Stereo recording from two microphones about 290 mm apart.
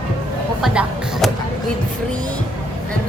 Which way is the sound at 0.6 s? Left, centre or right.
Centre.